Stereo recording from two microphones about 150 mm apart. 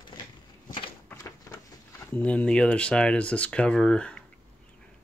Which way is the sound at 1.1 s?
20° left (ahead or behind).